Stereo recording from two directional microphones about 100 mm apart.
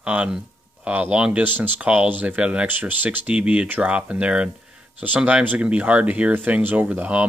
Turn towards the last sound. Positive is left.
turn(degrees=-15)  # may be behind; listen again after turning